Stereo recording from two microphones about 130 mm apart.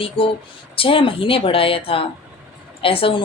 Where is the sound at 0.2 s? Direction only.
45° left (ahead or behind).